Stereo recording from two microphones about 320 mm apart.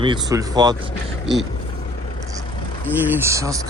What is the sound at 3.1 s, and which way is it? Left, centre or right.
Speech, centre.